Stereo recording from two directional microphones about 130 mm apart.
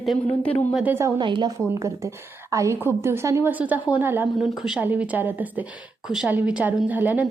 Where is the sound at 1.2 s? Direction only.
35° right (ahead or behind).